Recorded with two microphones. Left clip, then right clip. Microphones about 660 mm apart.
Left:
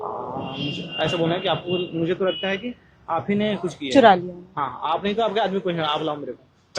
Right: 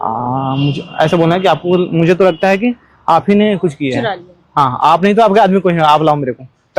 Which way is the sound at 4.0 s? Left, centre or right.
Left.